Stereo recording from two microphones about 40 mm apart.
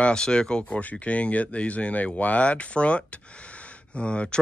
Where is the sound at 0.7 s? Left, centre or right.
Left.